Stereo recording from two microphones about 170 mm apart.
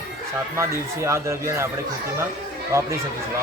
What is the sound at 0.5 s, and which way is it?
Speech, 15° right (ahead or behind).